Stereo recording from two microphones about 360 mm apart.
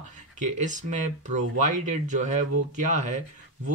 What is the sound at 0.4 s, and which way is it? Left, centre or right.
Speech, right.